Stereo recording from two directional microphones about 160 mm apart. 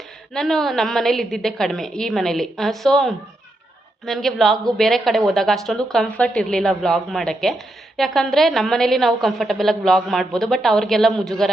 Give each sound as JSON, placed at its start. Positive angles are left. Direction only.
{"t": 0.3, "sound": "a woman's voice", "side_deg": 0}